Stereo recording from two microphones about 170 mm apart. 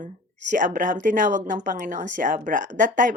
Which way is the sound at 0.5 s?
50° right (ahead or behind).